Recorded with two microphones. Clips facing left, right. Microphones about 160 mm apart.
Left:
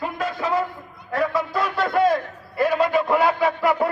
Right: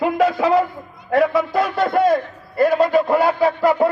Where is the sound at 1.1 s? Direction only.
65° right (ahead or behind).